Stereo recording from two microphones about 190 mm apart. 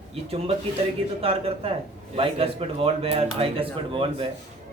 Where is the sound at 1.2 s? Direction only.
30° right (ahead or behind).